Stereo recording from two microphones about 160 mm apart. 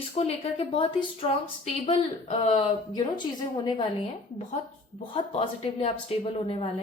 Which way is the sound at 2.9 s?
25° left (ahead or behind).